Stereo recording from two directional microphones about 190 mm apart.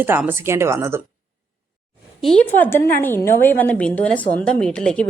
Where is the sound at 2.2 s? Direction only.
5° left (ahead or behind).